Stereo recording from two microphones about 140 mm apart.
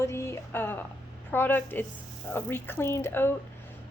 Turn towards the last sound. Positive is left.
turn(degrees=15)  # may be behind; listen again after turning